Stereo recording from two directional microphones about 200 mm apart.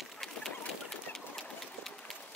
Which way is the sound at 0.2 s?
Centre (ahead or behind).